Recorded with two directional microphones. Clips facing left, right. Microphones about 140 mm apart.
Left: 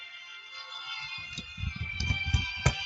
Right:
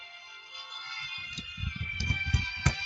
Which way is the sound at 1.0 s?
30° left (ahead or behind).